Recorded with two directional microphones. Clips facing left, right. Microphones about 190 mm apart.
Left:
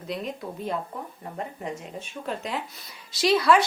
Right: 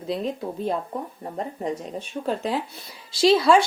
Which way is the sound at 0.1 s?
30° right (ahead or behind).